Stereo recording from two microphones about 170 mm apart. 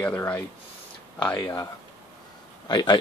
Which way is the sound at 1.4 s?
20° left (ahead or behind).